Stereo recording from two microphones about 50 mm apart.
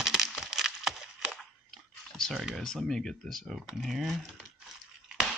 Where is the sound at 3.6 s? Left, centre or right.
Centre.